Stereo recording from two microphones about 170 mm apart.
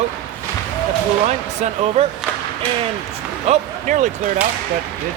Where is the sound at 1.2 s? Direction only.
40° right (ahead or behind).